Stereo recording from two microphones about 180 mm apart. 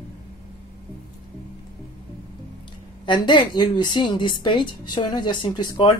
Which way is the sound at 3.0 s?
25° left (ahead or behind).